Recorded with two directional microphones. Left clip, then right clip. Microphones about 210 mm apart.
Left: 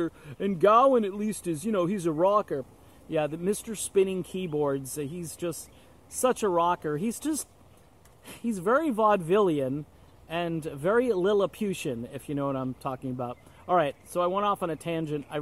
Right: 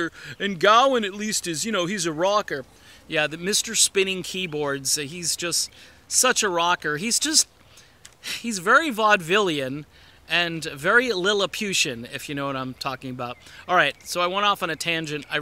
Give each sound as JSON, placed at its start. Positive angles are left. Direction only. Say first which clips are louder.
{"t": 0.2, "sound": "speech", "louder": "right 2 dB", "side_deg": -10}
{"t": 8.3, "sound": "speech", "louder": "right 7 dB", "side_deg": -15}
{"t": 11.1, "sound": "speech", "louder": "right 2 dB", "side_deg": -35}
{"t": 11.4, "sound": "speech", "louder": "right 6 dB", "side_deg": -10}